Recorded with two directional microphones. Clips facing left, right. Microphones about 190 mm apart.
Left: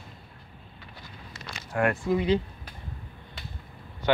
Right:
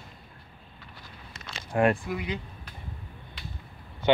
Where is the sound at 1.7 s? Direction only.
25° right (ahead or behind).